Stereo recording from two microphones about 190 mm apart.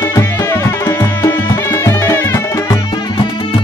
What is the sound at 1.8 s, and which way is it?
Music, 15° left (ahead or behind).